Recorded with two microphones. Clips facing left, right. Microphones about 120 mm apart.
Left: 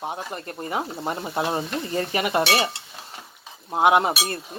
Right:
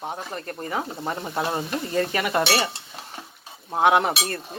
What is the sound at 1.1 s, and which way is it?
Frying, 5° left (ahead or behind).